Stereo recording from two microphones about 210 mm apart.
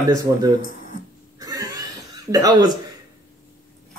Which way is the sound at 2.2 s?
20° right (ahead or behind).